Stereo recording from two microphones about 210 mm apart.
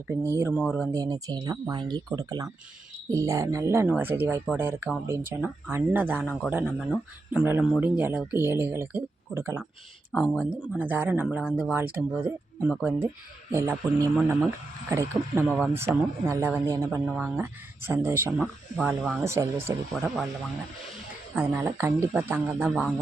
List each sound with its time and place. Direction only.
0.1 s speech: 10° right (ahead or behind)
0.6 s speech: 5° left (ahead or behind)
0.9 s speech: 15° right (ahead or behind)
21.3 s speech: 10° right (ahead or behind)